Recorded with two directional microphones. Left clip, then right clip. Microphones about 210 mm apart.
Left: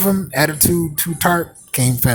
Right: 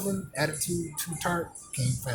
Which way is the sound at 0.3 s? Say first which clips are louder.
Left 13 dB; 35° left (ahead or behind).